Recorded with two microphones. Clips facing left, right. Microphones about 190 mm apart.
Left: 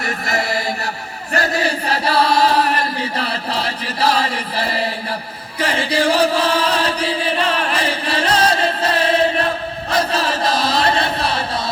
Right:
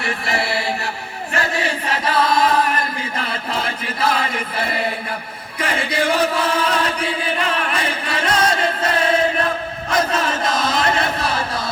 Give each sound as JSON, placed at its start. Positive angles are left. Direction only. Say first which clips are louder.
{"t": 0.0, "sound": "chant", "louder": "left 1 dB", "side_deg": 40}